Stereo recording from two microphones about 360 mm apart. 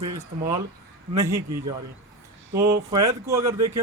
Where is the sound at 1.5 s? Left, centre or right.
Right.